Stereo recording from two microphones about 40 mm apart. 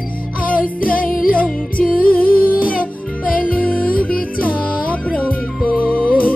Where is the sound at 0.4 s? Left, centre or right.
Left.